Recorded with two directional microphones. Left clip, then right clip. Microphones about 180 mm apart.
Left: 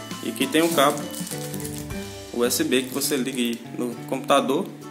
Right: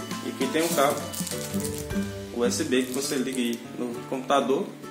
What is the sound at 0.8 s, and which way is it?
Speech, 55° left (ahead or behind).